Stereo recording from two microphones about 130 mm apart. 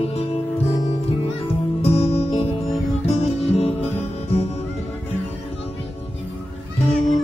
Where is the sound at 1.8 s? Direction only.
50° left (ahead or behind).